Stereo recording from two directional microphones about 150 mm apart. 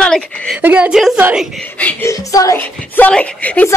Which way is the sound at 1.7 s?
10° left (ahead or behind).